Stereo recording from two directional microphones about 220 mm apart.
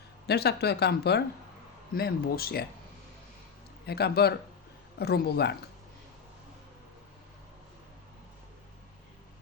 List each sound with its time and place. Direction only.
0.3 s speech: 45° left (ahead or behind)
3.8 s speech: 45° left (ahead or behind)